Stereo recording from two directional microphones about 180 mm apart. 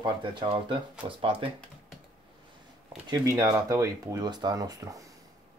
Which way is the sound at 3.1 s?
20° right (ahead or behind).